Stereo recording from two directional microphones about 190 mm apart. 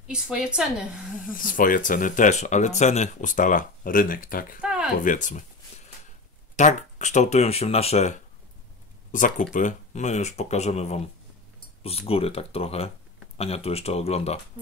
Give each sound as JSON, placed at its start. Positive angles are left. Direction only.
{"t": 0.0, "sound": "a woman's voice", "side_deg": -5}
{"t": 1.3, "sound": "speech", "side_deg": 45}
{"t": 4.6, "sound": "a sound", "side_deg": -5}
{"t": 4.9, "sound": "speech", "side_deg": 45}
{"t": 6.5, "sound": "speech", "side_deg": 40}